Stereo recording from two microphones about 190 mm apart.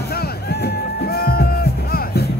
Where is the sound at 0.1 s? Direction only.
55° left (ahead or behind).